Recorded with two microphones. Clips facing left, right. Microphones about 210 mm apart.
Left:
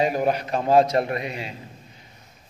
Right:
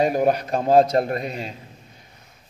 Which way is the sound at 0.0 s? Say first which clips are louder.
Right 3 dB; 45° right (ahead or behind).